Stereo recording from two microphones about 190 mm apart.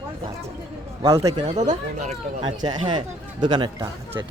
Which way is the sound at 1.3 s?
35° right (ahead or behind).